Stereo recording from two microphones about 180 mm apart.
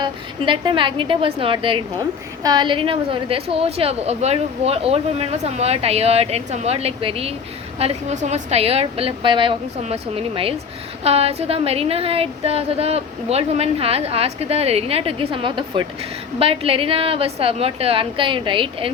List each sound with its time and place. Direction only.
0.0 s a woman's voice: 25° right (ahead or behind)